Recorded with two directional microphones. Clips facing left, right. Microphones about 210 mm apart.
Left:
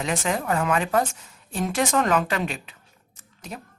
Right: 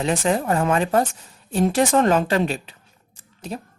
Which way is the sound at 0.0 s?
35° right (ahead or behind).